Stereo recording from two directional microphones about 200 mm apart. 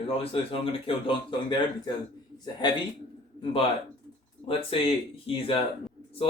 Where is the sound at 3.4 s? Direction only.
30° left (ahead or behind).